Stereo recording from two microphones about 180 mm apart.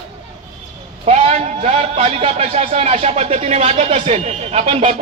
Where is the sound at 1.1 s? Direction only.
35° right (ahead or behind).